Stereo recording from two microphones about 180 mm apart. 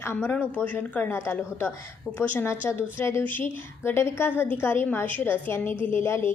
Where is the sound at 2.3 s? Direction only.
10° left (ahead or behind).